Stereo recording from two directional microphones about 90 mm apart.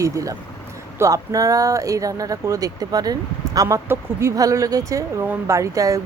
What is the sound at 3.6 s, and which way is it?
Speech, 25° right (ahead or behind).